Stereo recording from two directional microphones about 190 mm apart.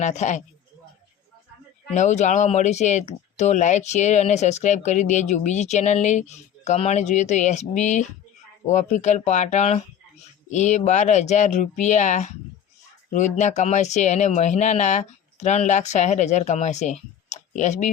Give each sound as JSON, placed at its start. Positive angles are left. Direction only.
{"t": 0.0, "sound": "speech", "side_deg": 40}
{"t": 1.9, "sound": "speech", "side_deg": 40}